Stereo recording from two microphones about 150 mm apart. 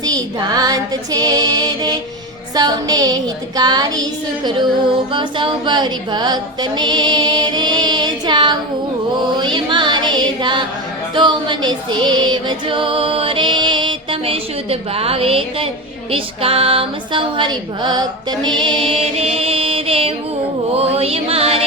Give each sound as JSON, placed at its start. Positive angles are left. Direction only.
{"t": 0.0, "sound": "music", "side_deg": -25}
{"t": 5.1, "sound": "music", "side_deg": -35}
{"t": 18.9, "sound": "mantra", "side_deg": -40}
{"t": 20.7, "sound": "music", "side_deg": -45}